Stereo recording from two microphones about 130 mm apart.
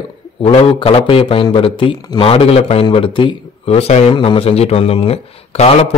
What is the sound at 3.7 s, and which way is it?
Speech, 55° left (ahead or behind).